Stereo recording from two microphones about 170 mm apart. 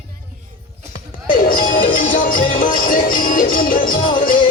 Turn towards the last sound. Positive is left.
turn(degrees=55)  # may be behind; listen again after turning